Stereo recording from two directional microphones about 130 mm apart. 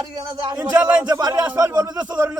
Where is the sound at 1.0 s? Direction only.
30° right (ahead or behind).